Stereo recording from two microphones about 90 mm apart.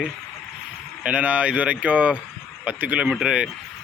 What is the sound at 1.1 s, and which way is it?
Speech, 15° right (ahead or behind).